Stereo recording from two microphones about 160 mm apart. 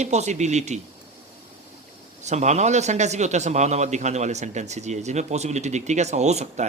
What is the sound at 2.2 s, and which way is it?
A man's voice, 45° right (ahead or behind).